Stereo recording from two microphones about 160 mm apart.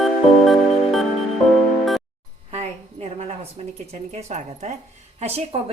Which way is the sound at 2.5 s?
40° right (ahead or behind).